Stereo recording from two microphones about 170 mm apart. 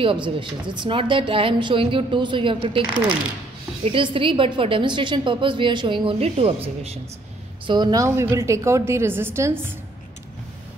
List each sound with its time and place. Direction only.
0.0 s a woman's voice: 30° right (ahead or behind)
3.8 s a woman's voice: 30° right (ahead or behind)
7.6 s a woman's voice: 25° right (ahead or behind)